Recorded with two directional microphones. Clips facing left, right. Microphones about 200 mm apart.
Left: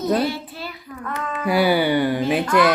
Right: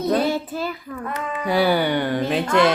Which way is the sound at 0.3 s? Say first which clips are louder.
Right 5 dB; 45° right (ahead or behind).